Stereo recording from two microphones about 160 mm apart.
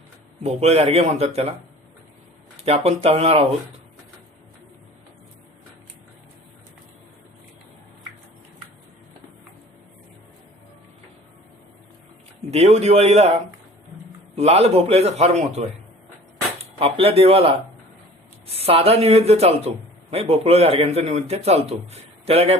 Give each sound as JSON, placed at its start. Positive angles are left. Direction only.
{"t": 0.4, "sound": "a man's voice", "side_deg": -40}
{"t": 2.6, "sound": "a man's voice", "side_deg": -40}
{"t": 12.5, "sound": "a man's voice", "side_deg": -40}
{"t": 14.3, "sound": "a man's voice", "side_deg": -40}
{"t": 16.7, "sound": "a man's voice", "side_deg": -40}